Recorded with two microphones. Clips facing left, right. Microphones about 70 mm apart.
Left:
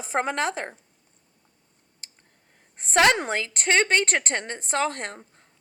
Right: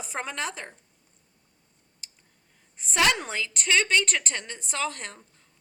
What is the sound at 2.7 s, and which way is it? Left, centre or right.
A woman's voice, left.